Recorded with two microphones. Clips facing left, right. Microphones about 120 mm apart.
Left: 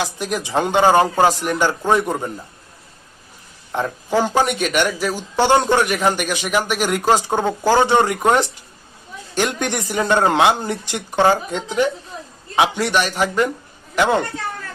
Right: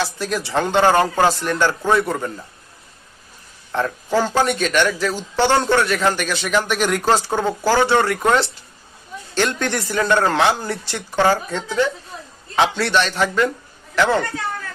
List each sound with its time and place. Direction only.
0.0 s speech: 15° left (ahead or behind)
3.7 s speech: 15° left (ahead or behind)